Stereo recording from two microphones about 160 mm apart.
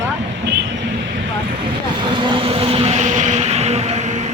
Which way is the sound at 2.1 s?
35° right (ahead or behind).